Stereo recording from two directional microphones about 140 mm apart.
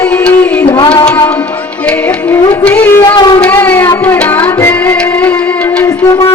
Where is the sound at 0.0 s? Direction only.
10° left (ahead or behind).